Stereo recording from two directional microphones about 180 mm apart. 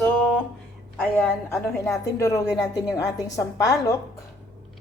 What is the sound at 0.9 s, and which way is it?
A woman's voice, 10° left (ahead or behind).